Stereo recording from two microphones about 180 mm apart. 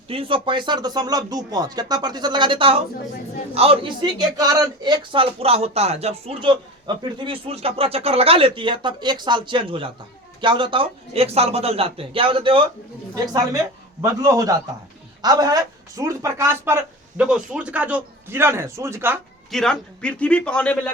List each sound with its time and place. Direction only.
0.1 s a man's voice: 30° right (ahead or behind); by 19.2 s 15° right (ahead or behind)
19.5 s a man's voice: 5° left (ahead or behind)